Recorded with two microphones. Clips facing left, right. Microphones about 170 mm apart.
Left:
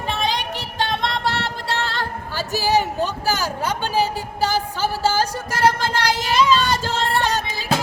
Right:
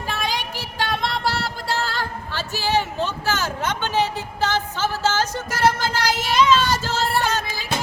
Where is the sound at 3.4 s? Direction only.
35° left (ahead or behind).